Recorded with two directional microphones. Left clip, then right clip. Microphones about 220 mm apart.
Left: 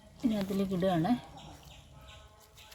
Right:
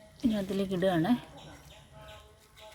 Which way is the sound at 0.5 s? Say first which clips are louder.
Right 3 dB; 10° right (ahead or behind).